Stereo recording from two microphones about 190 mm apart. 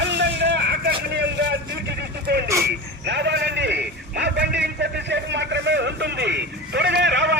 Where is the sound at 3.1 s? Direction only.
65° right (ahead or behind).